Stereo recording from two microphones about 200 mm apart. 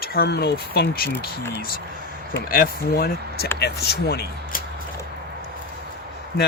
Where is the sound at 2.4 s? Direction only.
50° left (ahead or behind).